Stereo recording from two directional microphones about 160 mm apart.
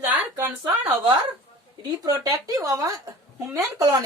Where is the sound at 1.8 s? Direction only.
25° right (ahead or behind).